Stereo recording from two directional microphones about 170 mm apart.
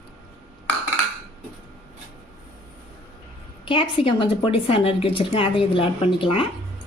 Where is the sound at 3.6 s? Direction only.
30° left (ahead or behind).